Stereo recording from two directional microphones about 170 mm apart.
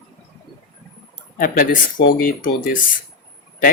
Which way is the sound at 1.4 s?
55° left (ahead or behind).